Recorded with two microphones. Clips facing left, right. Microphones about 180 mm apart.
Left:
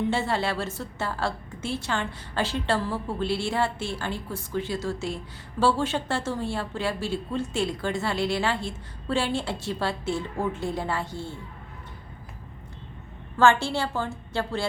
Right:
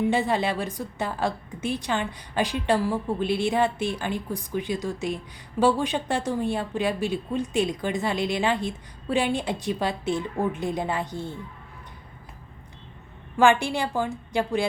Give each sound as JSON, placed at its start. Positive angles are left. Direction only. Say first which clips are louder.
{"t": 0.0, "sound": "a woman's voice", "louder": "right 3 dB", "side_deg": -15}
{"t": 13.3, "sound": "a woman's voice", "louder": "right 1 dB", "side_deg": -15}